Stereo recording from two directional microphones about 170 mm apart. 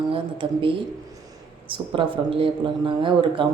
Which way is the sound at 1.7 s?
30° right (ahead or behind).